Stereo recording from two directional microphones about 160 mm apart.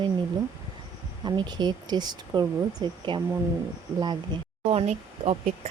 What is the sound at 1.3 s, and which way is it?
Speech, 25° right (ahead or behind).